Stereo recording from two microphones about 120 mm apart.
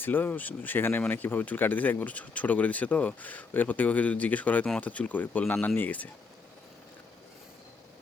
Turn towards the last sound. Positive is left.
turn(degrees=15)  # may be behind; listen again after turning